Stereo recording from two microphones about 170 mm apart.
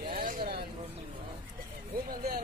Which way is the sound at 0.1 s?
55° right (ahead or behind).